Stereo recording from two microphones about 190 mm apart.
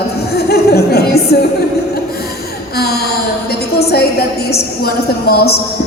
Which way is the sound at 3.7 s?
55° left (ahead or behind).